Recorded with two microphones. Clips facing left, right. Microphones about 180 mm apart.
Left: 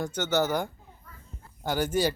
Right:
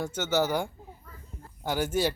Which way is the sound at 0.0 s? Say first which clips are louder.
Even; 5° right (ahead or behind).